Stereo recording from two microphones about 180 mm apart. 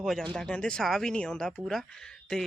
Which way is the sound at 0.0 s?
Centre (ahead or behind).